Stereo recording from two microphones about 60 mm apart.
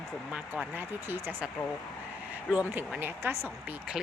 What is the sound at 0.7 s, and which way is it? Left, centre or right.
Speech, right.